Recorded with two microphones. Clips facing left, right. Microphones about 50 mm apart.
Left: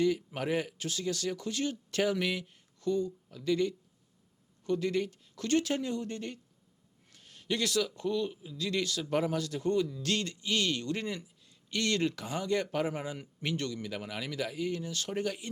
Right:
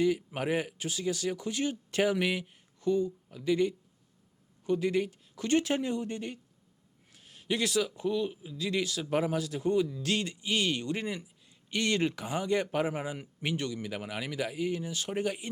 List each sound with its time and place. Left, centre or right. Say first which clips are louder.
0.0 s speech: right 1 dB; centre